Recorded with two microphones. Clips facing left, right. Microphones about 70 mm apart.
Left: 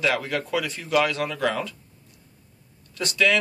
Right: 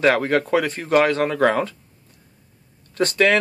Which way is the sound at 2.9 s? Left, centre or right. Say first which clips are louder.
Right 5 dB; right.